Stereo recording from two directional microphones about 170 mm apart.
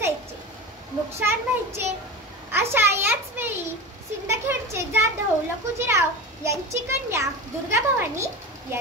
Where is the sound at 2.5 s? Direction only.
15° right (ahead or behind).